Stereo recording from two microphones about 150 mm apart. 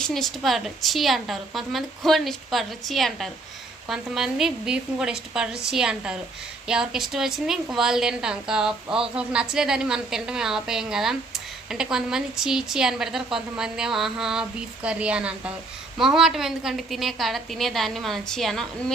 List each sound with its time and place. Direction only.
0.0 s a woman's voice: centre (ahead or behind)